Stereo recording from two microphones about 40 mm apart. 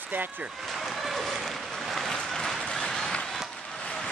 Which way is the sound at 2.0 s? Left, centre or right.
Centre.